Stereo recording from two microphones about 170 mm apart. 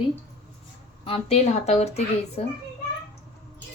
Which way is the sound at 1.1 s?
35° left (ahead or behind).